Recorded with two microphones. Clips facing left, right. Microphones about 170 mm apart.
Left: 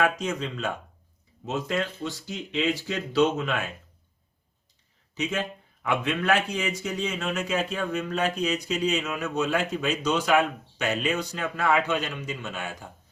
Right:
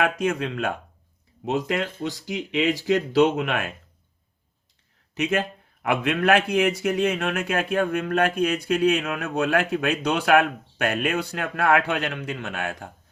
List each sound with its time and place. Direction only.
0.0 s a man's voice: 60° right (ahead or behind)
2.2 s a man's voice: 70° right (ahead or behind)
5.1 s a man's voice: 65° right (ahead or behind)